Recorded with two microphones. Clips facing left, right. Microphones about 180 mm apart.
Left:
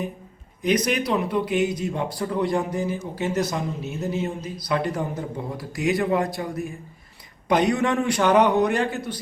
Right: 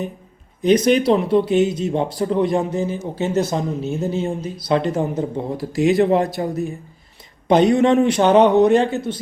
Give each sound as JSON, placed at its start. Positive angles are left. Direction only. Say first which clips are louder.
{"t": 0.6, "sound": "speech", "louder": "right 8 dB", "side_deg": -30}